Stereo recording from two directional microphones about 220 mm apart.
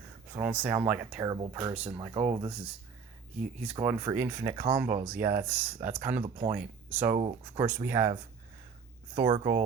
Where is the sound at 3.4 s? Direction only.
5° right (ahead or behind).